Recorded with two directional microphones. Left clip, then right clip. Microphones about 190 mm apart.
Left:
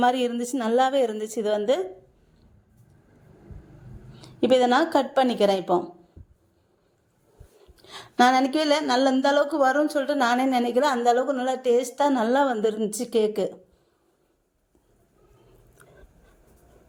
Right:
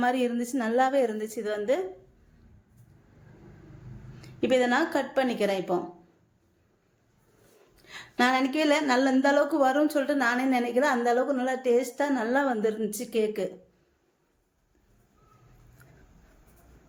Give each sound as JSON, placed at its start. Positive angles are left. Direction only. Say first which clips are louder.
{"t": 0.0, "sound": "a woman's voice", "louder": "left 4 dB", "side_deg": 35}
{"t": 4.2, "sound": "a woman's voice", "louder": "left 5 dB", "side_deg": 30}
{"t": 7.8, "sound": "a sound", "louder": "left 6 dB", "side_deg": 25}
{"t": 8.5, "sound": "a woman's voice", "louder": "left 2 dB", "side_deg": 30}